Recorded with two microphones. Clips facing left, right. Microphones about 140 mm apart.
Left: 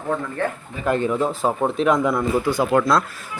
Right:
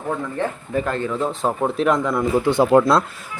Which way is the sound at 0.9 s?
15° left (ahead or behind).